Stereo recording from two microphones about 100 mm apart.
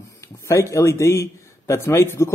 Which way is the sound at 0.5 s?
30° left (ahead or behind).